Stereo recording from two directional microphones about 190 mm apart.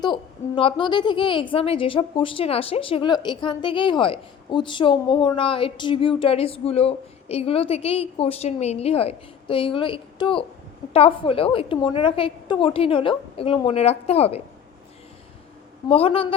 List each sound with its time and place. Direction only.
0.0 s a woman's voice: 25° left (ahead or behind)
15.9 s a woman's voice: 30° left (ahead or behind)